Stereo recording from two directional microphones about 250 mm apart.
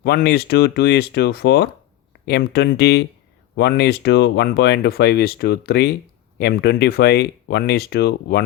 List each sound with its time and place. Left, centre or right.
0.0 s speech: left